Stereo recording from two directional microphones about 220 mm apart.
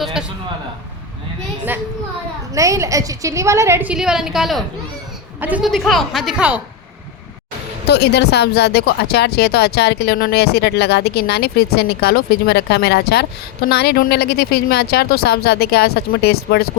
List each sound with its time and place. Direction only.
0.0 s a man's voice: 5° right (ahead or behind)
2.5 s a woman's voice: 15° right (ahead or behind)
7.9 s speech: 50° left (ahead or behind)